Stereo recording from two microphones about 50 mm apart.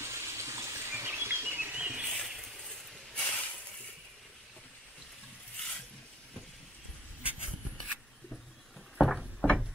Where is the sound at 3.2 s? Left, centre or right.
Left.